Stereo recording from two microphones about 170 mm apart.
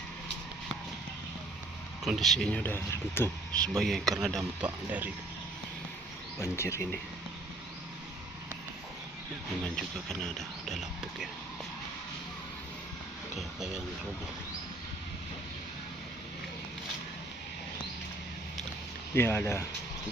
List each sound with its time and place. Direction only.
2.0 s speech: centre (ahead or behind)
6.4 s speech: 15° left (ahead or behind)
9.6 s speech: 5° left (ahead or behind)
13.6 s speech: 5° right (ahead or behind)
19.1 s speech: 15° left (ahead or behind)